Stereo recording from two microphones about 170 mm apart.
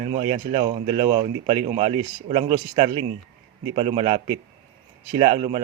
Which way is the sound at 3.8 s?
35° right (ahead or behind).